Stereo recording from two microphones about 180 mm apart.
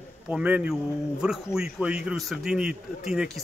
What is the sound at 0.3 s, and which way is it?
A man's voice, 5° right (ahead or behind).